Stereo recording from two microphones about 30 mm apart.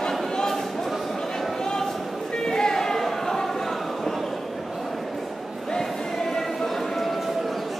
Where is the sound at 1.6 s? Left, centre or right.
Left.